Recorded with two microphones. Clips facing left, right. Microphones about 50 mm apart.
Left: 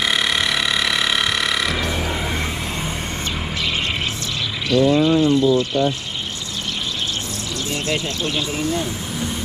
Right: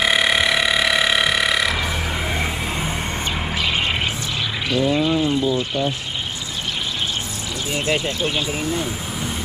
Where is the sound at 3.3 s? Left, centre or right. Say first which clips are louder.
Right 2 dB; centre.